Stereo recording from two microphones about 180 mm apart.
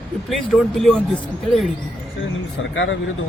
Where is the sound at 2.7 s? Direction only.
90° left.